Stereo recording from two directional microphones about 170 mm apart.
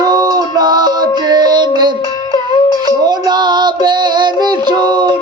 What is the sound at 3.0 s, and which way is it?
Female singing, 25° right (ahead or behind).